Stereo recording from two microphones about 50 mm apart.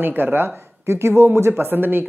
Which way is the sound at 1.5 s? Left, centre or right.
Right.